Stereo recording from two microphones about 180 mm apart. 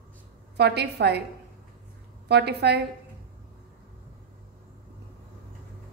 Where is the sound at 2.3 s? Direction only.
65° right (ahead or behind).